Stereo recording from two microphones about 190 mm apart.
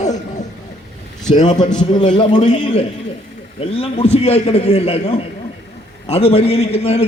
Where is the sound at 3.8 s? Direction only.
30° left (ahead or behind).